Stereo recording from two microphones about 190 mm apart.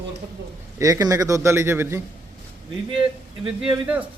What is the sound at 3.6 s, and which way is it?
Speech, 5° right (ahead or behind).